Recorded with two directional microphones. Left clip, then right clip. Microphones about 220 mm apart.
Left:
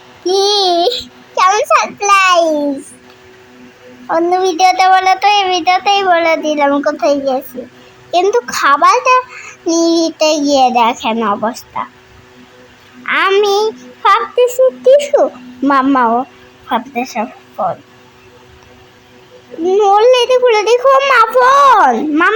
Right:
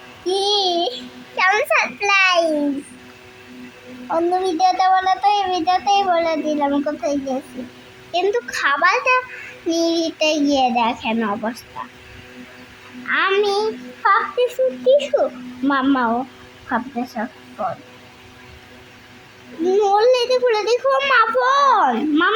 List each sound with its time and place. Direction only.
0.3 s a sound: 20° left (ahead or behind)
4.1 s child singing: 15° left (ahead or behind)
13.1 s child singing: 15° left (ahead or behind)
16.6 s a woman's voice: 20° left (ahead or behind)
19.6 s child singing: 10° left (ahead or behind)